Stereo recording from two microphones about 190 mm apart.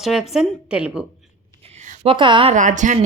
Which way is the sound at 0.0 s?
Centre (ahead or behind).